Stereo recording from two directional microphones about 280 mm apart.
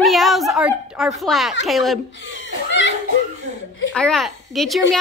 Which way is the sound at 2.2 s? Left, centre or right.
Left.